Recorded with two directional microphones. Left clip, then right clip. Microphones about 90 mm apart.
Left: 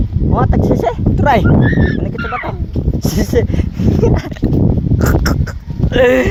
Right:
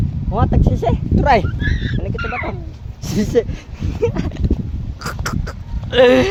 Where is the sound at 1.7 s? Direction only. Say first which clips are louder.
Left 9 dB; 55° left (ahead or behind); by 2.5 s 90° left.